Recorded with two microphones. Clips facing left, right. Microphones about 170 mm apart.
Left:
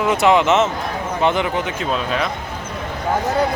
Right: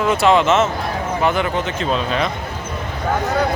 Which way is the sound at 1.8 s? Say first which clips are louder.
Right 3 dB; 5° left (ahead or behind).